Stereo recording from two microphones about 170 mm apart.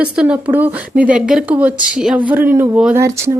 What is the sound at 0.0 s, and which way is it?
A woman's voice, 5° right (ahead or behind).